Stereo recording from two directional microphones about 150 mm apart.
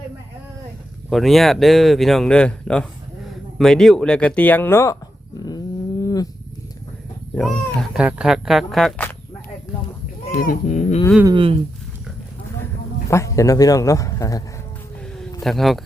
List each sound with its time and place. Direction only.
1.1 s speech: centre (ahead or behind); by 4.9 s 20° left (ahead or behind)
5.4 s a sound: 25° left (ahead or behind)
7.3 s speech: 5° left (ahead or behind)
7.9 s speech: 5° right (ahead or behind)
10.3 s speech: 70° left (ahead or behind); by 11.0 s 55° left (ahead or behind)
11.3 s speech: 35° right (ahead or behind)
13.1 s a man's voice: 20° left (ahead or behind)
15.0 s a sound: 5° left (ahead or behind)